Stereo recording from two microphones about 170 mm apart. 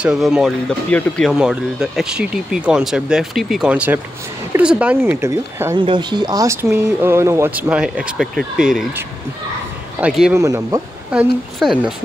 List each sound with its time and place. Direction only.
0.0 s speech: 5° right (ahead or behind)
5.8 s speech: 25° right (ahead or behind); by 10.3 s 5° right (ahead or behind)
10.3 s speech: 20° right (ahead or behind)
11.1 s speech: 5° right (ahead or behind)